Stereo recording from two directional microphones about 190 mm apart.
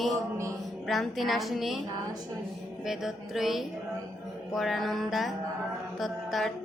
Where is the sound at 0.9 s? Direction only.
Centre (ahead or behind).